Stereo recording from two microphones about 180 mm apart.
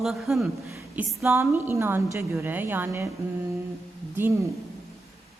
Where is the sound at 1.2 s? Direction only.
15° right (ahead or behind).